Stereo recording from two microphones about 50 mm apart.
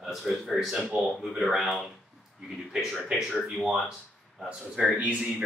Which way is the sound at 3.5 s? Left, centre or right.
Centre.